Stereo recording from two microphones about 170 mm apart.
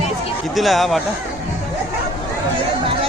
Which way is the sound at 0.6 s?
Centre (ahead or behind).